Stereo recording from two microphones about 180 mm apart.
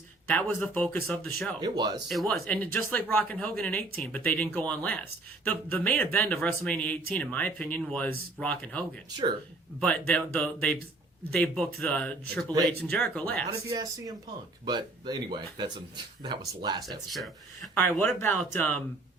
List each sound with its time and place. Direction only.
0.3 s speech: 10° left (ahead or behind)
1.6 s speech: 25° right (ahead or behind)
2.0 s speech: centre (ahead or behind)
9.0 s speech: 25° right (ahead or behind)
10.1 s speech: 5° left (ahead or behind)
13.5 s speech: 20° right (ahead or behind)
17.2 s speech: centre (ahead or behind)